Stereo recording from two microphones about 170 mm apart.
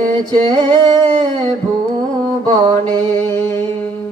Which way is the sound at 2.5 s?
25° right (ahead or behind).